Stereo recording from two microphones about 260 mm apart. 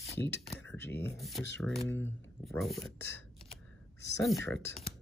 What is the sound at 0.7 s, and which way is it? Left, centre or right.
Speech, left.